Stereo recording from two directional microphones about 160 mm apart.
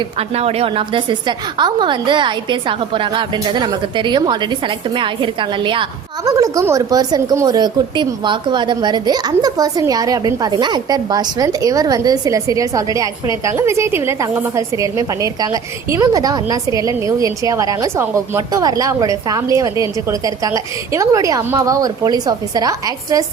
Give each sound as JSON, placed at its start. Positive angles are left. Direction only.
{"t": 0.2, "sound": "a woman's voice", "side_deg": -40}
{"t": 6.2, "sound": "a woman's voice", "side_deg": -20}